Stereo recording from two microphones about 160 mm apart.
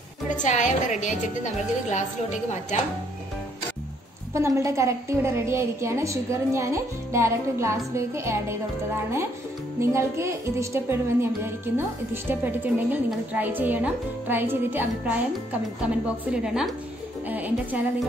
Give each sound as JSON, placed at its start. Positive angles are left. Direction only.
{"t": 0.4, "sound": "a woman's voice", "side_deg": 50}
{"t": 4.3, "sound": "speech", "side_deg": -20}
{"t": 9.8, "sound": "speech", "side_deg": -15}
{"t": 16.3, "sound": "a woman's voice", "side_deg": -5}